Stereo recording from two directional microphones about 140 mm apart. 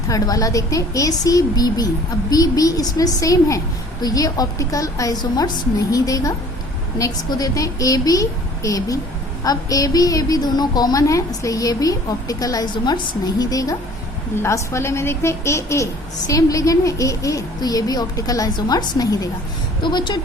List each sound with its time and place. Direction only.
0.1 s a woman's voice: 25° left (ahead or behind)